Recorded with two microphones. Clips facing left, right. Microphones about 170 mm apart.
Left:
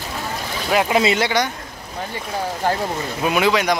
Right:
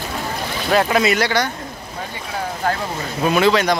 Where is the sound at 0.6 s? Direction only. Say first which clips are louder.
Right 1 dB; 15° left (ahead or behind).